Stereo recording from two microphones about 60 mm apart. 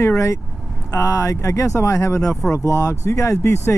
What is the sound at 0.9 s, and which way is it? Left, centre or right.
Speech, left.